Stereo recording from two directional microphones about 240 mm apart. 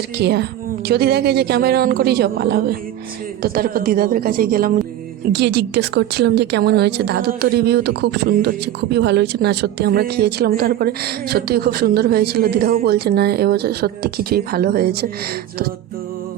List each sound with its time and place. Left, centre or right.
0.2 s a woman's voice: right